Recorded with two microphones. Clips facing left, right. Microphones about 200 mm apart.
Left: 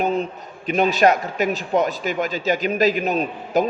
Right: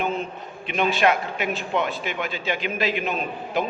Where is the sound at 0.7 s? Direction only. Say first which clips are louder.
Left 4 dB; 40° left (ahead or behind).